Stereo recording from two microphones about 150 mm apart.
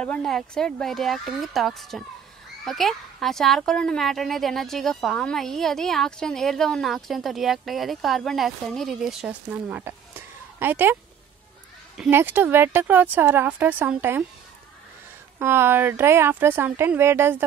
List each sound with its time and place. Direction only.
0.0 s a woman's voice: 5° left (ahead or behind); by 11.0 s 15° right (ahead or behind)
12.1 s speech: 15° right (ahead or behind)
15.3 s speech: 15° right (ahead or behind)